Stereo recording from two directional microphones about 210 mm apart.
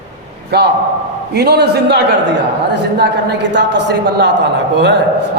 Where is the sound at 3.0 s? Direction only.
55° right (ahead or behind).